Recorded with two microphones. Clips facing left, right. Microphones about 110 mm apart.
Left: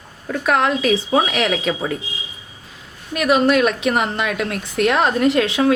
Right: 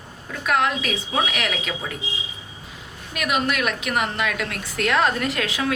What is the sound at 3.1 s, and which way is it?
A woman's voice, 35° left (ahead or behind).